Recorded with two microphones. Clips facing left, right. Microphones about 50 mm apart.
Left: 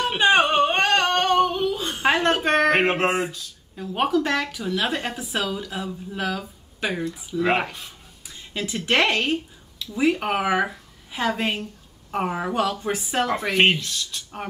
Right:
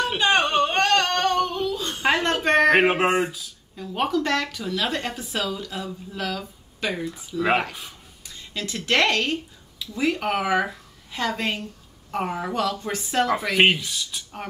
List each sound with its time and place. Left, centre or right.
0.2 s a sound: centre
1.9 s speech: centre
3.9 s speech: centre
8.5 s speech: centre
13.6 s speech: centre